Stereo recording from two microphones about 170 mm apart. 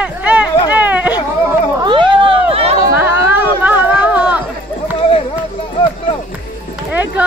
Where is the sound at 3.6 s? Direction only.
10° right (ahead or behind).